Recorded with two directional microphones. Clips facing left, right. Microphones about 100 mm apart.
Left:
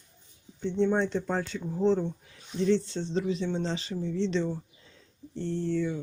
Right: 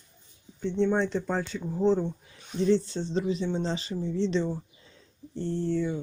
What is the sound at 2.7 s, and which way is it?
Speech, 40° right (ahead or behind).